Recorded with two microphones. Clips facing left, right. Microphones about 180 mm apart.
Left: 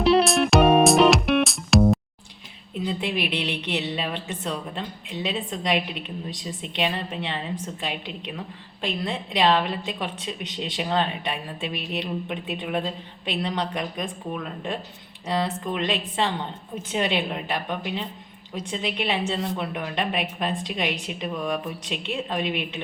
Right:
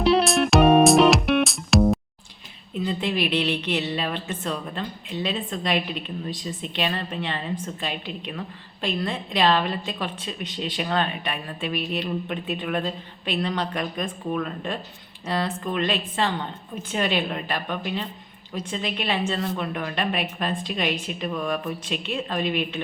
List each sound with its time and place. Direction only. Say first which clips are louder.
0.0 s music: left 1 dB; centre (ahead or behind)
2.8 s a woman's voice: right 2 dB; 15° left (ahead or behind)